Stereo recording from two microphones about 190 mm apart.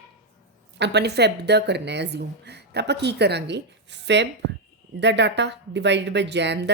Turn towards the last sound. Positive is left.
turn(degrees=-65)  # may be behind; listen again after turning